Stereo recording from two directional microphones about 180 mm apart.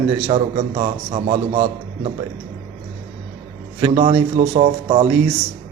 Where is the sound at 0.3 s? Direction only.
35° right (ahead or behind).